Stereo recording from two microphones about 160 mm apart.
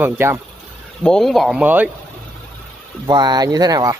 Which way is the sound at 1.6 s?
10° right (ahead or behind).